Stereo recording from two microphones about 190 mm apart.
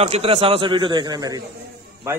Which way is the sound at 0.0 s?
30° right (ahead or behind).